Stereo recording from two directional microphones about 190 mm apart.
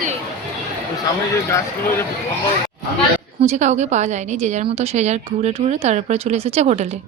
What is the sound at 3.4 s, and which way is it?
Speech, 35° right (ahead or behind).